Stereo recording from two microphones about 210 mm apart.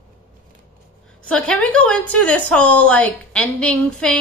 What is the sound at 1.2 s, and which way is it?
A woman's voice, 5° left (ahead or behind).